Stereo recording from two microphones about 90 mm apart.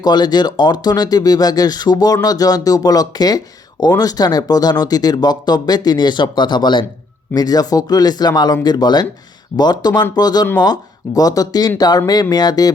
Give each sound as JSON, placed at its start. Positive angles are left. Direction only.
{"t": 0.0, "sound": "speech", "side_deg": 50}
{"t": 7.3, "sound": "speech", "side_deg": 45}